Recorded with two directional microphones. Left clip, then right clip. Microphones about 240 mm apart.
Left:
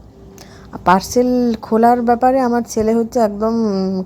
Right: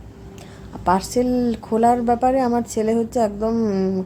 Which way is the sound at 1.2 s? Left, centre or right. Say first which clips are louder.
Left 5 dB; centre.